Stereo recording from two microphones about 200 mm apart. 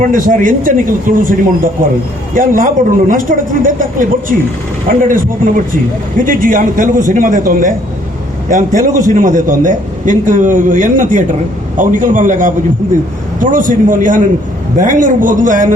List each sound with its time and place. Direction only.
0.0 s a man's voice: 40° right (ahead or behind)